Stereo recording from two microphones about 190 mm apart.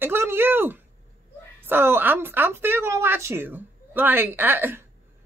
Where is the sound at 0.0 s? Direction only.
10° right (ahead or behind).